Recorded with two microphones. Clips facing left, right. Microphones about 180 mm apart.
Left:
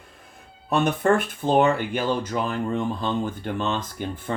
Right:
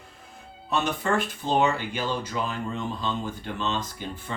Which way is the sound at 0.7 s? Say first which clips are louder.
Left 5 dB; 55° left (ahead or behind).